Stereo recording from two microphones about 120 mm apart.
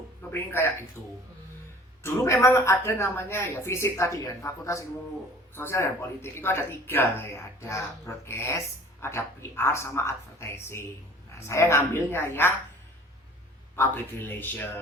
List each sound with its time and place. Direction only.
0.3 s speech: 20° left (ahead or behind)
2.0 s speech: 25° left (ahead or behind)
13.7 s speech: 15° left (ahead or behind)